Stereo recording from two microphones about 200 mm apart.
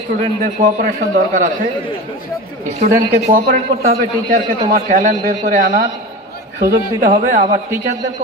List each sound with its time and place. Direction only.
0.6 s a man's voice: 40° right (ahead or behind)
2.8 s a man's voice: 40° right (ahead or behind)